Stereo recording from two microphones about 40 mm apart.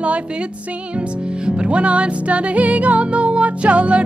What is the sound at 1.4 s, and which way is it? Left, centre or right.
Music, right.